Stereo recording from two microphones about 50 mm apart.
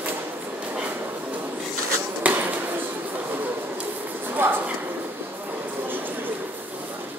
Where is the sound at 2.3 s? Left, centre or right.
Right.